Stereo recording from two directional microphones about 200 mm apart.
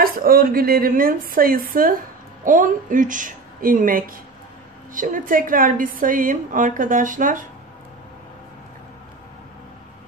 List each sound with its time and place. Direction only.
0.0 s a woman's voice: 45° right (ahead or behind)